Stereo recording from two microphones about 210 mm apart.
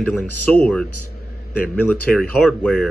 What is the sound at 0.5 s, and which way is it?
Speech, 5° left (ahead or behind).